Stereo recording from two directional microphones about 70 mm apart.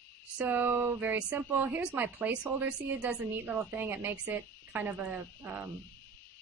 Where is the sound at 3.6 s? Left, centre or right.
Right.